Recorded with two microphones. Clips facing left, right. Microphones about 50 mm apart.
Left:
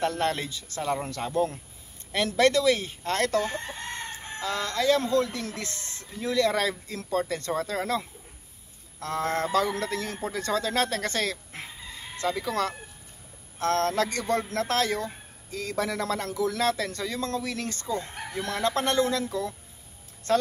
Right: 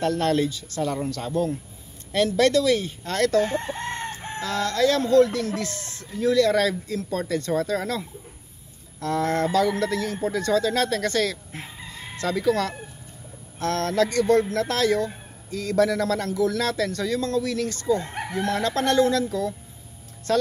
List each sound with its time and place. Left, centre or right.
0.0 s speech: left
9.0 s speech: left
18.1 s chicken: right
18.7 s speech: centre